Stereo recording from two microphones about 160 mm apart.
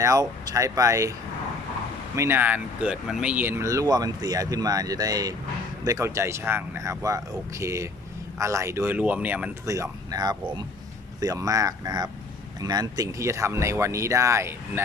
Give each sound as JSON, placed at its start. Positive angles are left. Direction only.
{"t": 0.0, "sound": "speech", "side_deg": -20}
{"t": 2.1, "sound": "speech", "side_deg": -15}